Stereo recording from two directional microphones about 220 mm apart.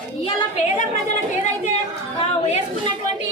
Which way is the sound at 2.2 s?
30° left (ahead or behind).